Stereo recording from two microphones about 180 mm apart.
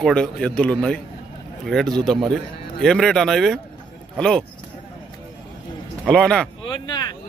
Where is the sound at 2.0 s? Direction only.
5° left (ahead or behind).